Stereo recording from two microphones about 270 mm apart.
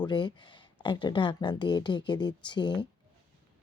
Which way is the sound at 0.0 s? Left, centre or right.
Centre.